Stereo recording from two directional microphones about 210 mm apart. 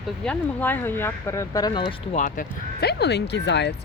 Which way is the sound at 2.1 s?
40° left (ahead or behind).